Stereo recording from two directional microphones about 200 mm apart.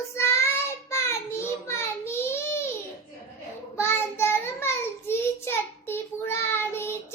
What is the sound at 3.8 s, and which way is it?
Child singing, 10° left (ahead or behind).